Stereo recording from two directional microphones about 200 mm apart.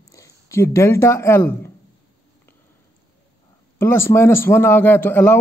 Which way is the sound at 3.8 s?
10° left (ahead or behind).